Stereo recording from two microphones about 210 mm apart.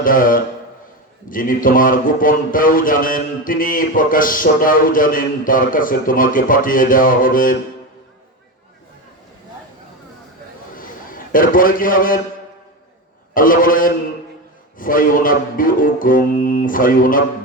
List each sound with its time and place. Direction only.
0.0 s speech: 40° left (ahead or behind)
10.8 s a sound: 40° left (ahead or behind)
13.3 s speech: 40° left (ahead or behind)